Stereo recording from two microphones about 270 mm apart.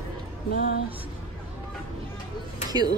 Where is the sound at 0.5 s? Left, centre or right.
Left.